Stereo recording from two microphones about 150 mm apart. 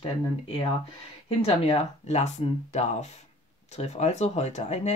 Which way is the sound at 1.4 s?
40° left (ahead or behind).